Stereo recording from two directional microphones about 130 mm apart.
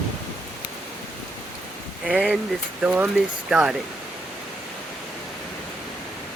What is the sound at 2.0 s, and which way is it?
Speech, 10° right (ahead or behind).